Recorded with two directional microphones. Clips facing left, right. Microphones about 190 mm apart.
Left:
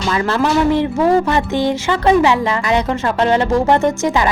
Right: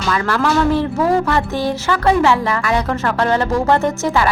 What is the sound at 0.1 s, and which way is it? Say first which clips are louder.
Speech: left 1 dB; 20° left (ahead or behind).